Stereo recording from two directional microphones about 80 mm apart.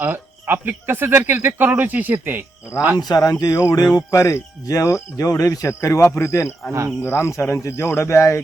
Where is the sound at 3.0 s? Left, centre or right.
Left.